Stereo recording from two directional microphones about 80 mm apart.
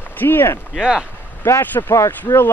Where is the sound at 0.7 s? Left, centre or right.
Centre.